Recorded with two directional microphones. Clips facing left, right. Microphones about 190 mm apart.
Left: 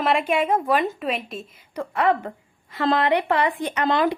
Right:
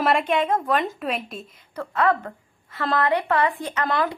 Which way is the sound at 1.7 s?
15° left (ahead or behind).